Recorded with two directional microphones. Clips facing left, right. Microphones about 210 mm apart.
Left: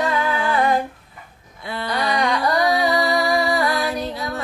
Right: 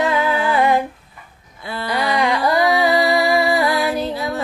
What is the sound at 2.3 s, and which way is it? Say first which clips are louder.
Carnatic music: right 2 dB; 25° right (ahead or behind).